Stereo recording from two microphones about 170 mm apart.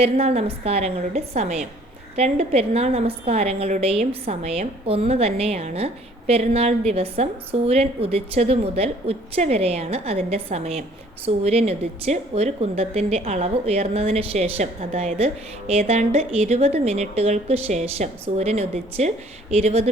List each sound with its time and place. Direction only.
0.0 s a woman's voice: 35° right (ahead or behind)